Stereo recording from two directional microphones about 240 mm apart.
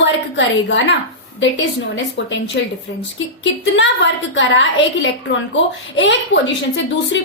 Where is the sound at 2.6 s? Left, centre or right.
Left.